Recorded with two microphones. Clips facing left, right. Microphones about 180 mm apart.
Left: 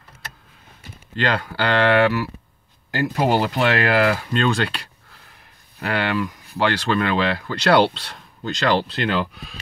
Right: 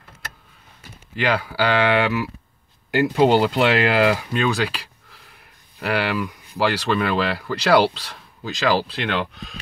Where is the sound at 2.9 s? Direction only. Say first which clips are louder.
Right 4 dB; 20° right (ahead or behind).